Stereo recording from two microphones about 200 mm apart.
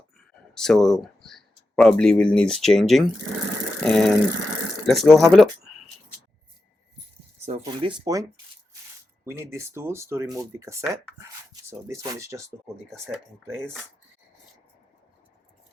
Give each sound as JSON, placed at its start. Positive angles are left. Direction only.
{"t": 0.5, "sound": "speech", "side_deg": 5}
{"t": 7.6, "sound": "speech", "side_deg": -25}
{"t": 9.4, "sound": "speech", "side_deg": -15}